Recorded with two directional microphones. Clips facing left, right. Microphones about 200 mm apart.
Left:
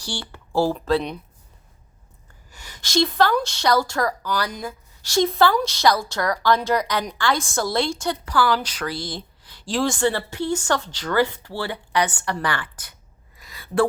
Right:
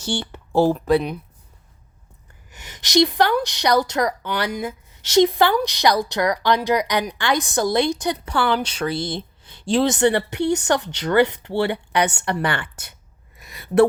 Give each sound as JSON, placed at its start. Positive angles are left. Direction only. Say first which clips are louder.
{"t": 0.0, "sound": "a woman's voice", "louder": "right 7 dB", "side_deg": -20}
{"t": 2.5, "sound": "a woman's voice", "louder": "right 4 dB", "side_deg": -20}
{"t": 13.4, "sound": "a sound", "louder": "right 5 dB", "side_deg": -25}